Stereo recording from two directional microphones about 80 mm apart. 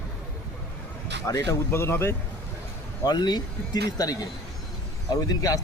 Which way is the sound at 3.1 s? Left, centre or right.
Left.